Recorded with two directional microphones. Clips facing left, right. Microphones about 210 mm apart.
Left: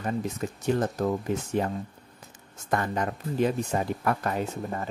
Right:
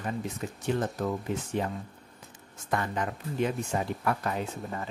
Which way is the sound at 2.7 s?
45° left (ahead or behind).